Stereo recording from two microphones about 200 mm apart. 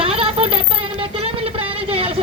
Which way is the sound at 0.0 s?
30° right (ahead or behind).